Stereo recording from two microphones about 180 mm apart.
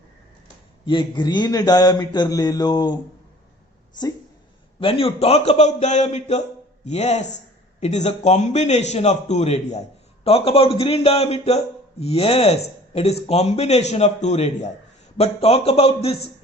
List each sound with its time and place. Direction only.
0.9 s a man's voice: 25° left (ahead or behind)
4.8 s a man's voice: 30° left (ahead or behind)